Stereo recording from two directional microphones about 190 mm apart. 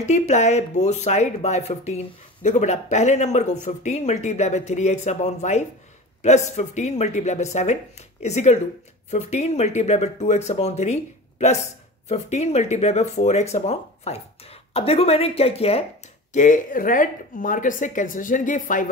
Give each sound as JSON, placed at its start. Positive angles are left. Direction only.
{"t": 0.1, "sound": "speech", "side_deg": 35}
{"t": 16.3, "sound": "speech", "side_deg": 45}